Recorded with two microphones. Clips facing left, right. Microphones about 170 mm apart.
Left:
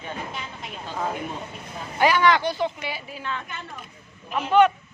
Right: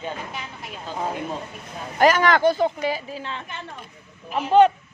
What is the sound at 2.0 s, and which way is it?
Speech, 45° right (ahead or behind).